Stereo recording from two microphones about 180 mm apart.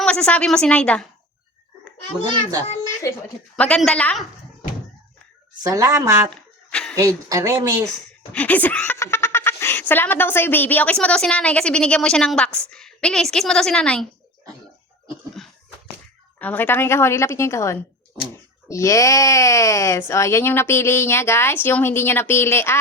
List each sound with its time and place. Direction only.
0.0 s a woman's voice: 5° left (ahead or behind)
2.2 s speech: 20° right (ahead or behind)
3.5 s a woman's voice: 5° left (ahead or behind)
5.7 s speech: 15° right (ahead or behind)
6.3 s a sound: 5° left (ahead or behind)
6.9 s speech: 20° right (ahead or behind)
8.3 s a woman's voice: 10° left (ahead or behind)
15.4 s a sound: centre (ahead or behind)
16.4 s speech: 10° left (ahead or behind)